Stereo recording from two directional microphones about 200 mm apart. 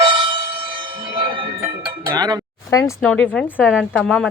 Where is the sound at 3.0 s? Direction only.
5° left (ahead or behind).